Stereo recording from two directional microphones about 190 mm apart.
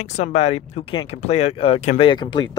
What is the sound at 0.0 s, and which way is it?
Speech, 35° left (ahead or behind).